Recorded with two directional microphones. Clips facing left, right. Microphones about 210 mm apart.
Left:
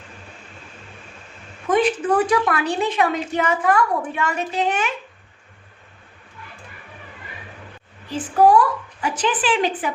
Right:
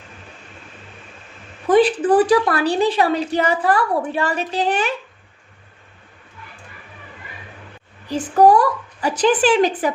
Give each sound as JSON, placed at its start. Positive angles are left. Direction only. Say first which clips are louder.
{"t": 1.6, "sound": "a woman's voice", "louder": "right 4 dB", "side_deg": -35}
{"t": 8.1, "sound": "a woman's voice", "louder": "right 2 dB", "side_deg": -40}